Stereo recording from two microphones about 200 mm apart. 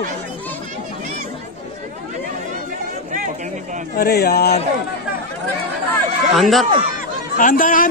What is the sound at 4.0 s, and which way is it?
Speech, 50° left (ahead or behind).